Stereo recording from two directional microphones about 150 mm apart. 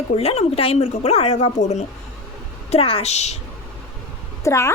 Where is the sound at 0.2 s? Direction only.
45° left (ahead or behind).